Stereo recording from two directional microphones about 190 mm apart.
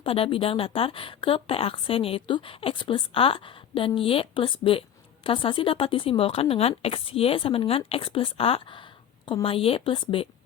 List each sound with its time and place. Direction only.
0.0 s a woman's voice: 30° left (ahead or behind)